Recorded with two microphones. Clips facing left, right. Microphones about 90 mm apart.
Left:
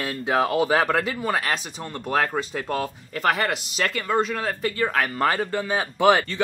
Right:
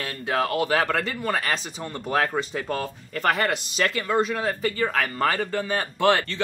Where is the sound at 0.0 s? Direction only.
15° left (ahead or behind).